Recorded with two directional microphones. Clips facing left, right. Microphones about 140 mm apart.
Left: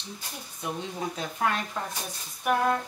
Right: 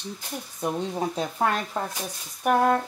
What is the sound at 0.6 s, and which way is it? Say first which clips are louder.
Speech: right 6 dB; 40° right (ahead or behind).